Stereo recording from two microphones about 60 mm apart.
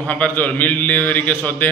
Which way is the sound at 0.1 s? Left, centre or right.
Left.